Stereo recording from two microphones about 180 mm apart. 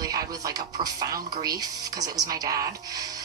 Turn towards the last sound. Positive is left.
turn(degrees=-20)  # may be behind; listen again after turning